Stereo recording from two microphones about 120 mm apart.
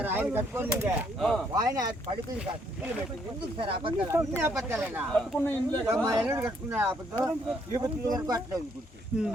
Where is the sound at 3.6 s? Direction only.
50° right (ahead or behind).